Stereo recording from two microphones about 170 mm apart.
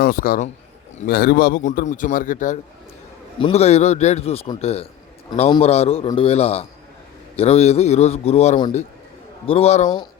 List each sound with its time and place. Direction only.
0.0 s speech: 55° left (ahead or behind)
1.0 s a man's voice: 60° left (ahead or behind)
3.4 s a man's voice: 40° left (ahead or behind)